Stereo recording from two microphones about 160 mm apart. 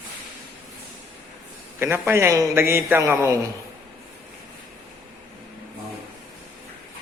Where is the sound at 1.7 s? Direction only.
15° right (ahead or behind).